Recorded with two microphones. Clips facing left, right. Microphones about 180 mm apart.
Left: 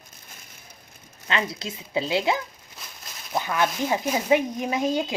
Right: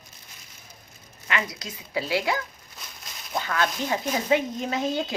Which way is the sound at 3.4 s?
15° left (ahead or behind).